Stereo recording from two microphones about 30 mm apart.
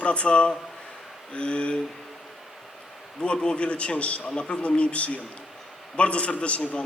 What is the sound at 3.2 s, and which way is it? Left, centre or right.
A man's voice, left.